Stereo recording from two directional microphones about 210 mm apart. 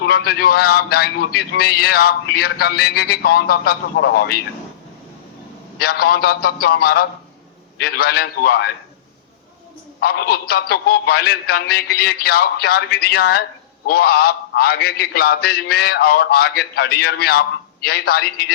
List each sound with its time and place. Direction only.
0.0 s a man's voice: 45° left (ahead or behind)
5.8 s a man's voice: 45° left (ahead or behind)
10.0 s a man's voice: 45° left (ahead or behind)